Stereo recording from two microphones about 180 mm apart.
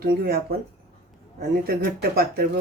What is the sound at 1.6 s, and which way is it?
Speech, 60° right (ahead or behind).